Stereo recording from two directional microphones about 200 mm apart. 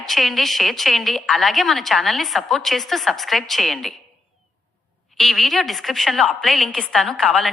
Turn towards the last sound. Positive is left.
turn(degrees=0)  # may be behind; listen again after turning